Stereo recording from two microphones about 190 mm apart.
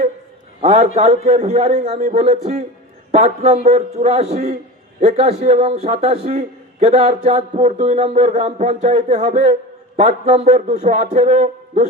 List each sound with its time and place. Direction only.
0.6 s a man's voice: 35° right (ahead or behind)
2.1 s a man's voice: 35° right (ahead or behind)